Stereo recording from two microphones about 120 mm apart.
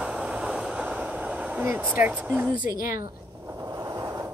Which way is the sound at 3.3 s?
25° right (ahead or behind).